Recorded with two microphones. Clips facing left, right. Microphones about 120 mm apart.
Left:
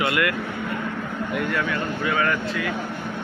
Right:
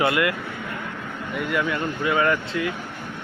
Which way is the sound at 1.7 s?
20° right (ahead or behind).